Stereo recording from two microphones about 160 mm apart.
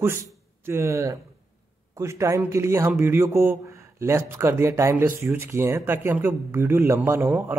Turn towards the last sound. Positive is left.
turn(degrees=-15)  # may be behind; listen again after turning